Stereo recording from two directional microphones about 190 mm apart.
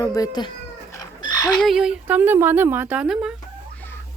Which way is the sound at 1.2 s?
20° left (ahead or behind).